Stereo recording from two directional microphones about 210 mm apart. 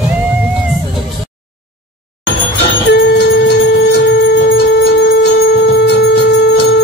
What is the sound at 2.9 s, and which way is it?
Music, 50° left (ahead or behind).